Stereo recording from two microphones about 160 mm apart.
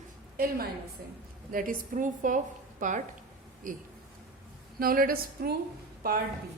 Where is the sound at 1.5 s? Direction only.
60° right (ahead or behind).